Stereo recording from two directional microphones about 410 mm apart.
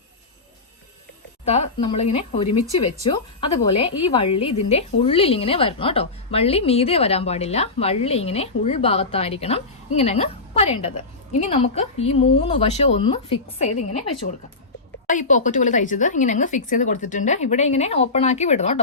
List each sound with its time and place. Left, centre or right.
1.5 s a woman's voice: centre
15.0 s a woman's voice: centre